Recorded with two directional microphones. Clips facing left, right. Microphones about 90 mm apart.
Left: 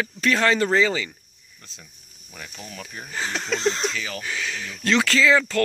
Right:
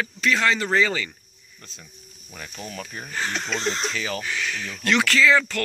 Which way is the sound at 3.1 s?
25° left (ahead or behind).